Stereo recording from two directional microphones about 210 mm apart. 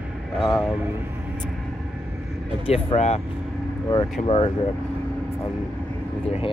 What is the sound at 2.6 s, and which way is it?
Speech, 30° left (ahead or behind).